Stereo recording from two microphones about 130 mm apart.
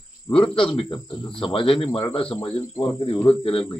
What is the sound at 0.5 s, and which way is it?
Speech, 40° left (ahead or behind).